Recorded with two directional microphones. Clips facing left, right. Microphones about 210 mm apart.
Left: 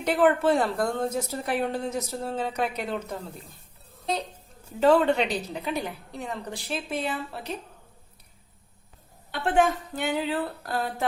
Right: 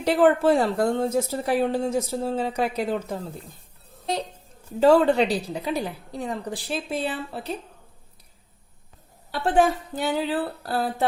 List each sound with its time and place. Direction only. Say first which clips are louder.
0.0 s speech: right 3 dB; 30° right (ahead or behind)
4.8 s a woman's voice: right 3 dB; 35° right (ahead or behind)
9.3 s a woman's voice: right 2 dB; 35° right (ahead or behind)